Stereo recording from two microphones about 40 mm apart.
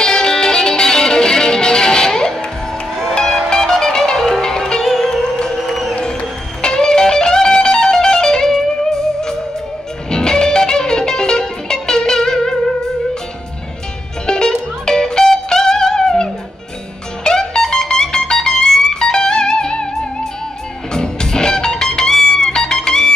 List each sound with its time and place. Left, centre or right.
0.0 s music: centre
3.0 s music: centre
14.2 s music: centre
20.9 s music: centre